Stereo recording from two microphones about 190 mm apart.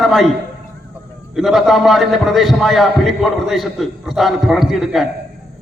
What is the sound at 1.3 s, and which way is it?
A man's voice, centre (ahead or behind).